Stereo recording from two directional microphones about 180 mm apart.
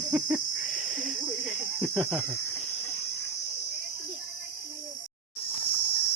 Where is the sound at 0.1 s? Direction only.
5° right (ahead or behind).